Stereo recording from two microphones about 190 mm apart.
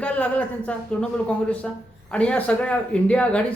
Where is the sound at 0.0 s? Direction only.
5° left (ahead or behind).